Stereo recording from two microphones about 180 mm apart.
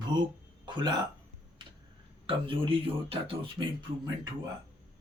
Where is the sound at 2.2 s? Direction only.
30° right (ahead or behind).